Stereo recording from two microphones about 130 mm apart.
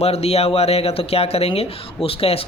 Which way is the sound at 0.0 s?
50° left (ahead or behind).